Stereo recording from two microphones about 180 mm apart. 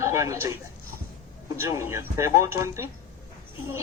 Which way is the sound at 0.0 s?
15° right (ahead or behind).